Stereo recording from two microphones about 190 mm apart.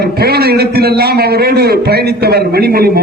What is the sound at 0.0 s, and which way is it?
A man's voice, 55° right (ahead or behind).